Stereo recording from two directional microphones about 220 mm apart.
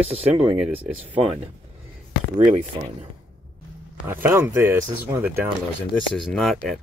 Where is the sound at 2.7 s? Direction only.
25° right (ahead or behind).